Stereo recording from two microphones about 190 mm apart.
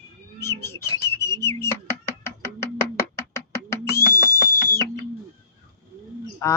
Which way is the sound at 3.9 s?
15° left (ahead or behind).